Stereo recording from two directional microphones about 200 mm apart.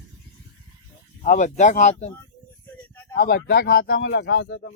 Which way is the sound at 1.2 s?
40° left (ahead or behind).